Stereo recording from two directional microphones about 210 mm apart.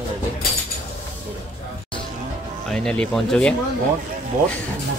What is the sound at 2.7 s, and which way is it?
Speech, 5° left (ahead or behind).